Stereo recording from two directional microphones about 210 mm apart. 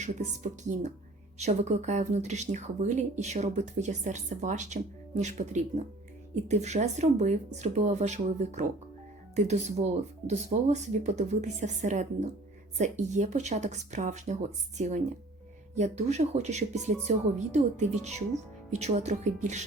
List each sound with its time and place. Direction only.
0.0 s a woman's voice: 35° right (ahead or behind)